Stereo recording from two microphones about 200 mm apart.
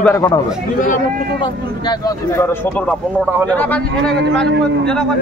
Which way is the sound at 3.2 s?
5° left (ahead or behind).